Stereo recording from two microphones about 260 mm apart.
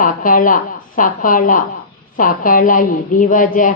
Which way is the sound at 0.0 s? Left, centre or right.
Left.